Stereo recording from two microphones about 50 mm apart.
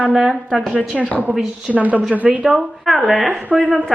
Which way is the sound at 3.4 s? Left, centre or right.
Right.